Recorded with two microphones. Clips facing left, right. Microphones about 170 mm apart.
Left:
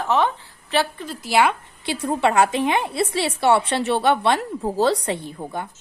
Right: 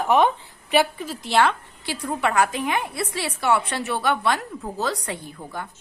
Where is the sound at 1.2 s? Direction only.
10° left (ahead or behind).